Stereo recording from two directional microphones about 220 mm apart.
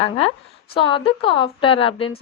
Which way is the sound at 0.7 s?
25° left (ahead or behind).